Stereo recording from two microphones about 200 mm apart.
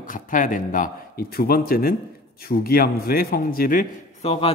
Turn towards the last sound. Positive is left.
turn(degrees=30)  # may be behind; listen again after turning